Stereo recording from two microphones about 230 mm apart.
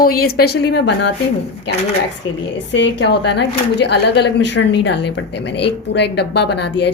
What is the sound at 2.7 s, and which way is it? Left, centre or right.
Speech, left.